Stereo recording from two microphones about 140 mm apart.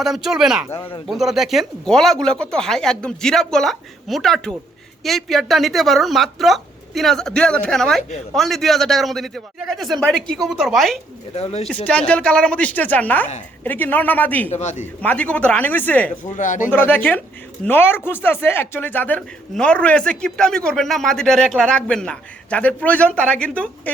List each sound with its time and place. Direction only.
0.0 s speech: centre (ahead or behind)
0.7 s speech: 15° left (ahead or behind)
1.0 s speech: centre (ahead or behind)
11.3 s speech: 45° left (ahead or behind)
11.9 s speech: 5° left (ahead or behind)
14.5 s speech: 55° left (ahead or behind)
15.0 s speech: 10° left (ahead or behind)
16.2 s speech: 65° left (ahead or behind)
16.7 s speech: 15° left (ahead or behind)